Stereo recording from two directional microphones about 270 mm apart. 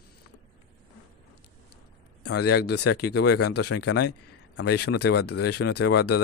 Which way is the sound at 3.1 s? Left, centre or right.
Left.